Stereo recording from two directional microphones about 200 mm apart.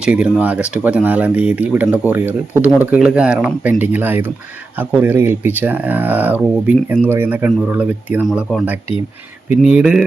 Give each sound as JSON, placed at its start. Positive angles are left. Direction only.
{"t": 0.0, "sound": "speech", "side_deg": -5}